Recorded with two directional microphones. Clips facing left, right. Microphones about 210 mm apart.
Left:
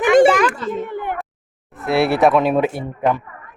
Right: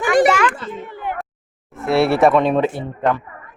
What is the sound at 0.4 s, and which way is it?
Children playing, 40° left (ahead or behind).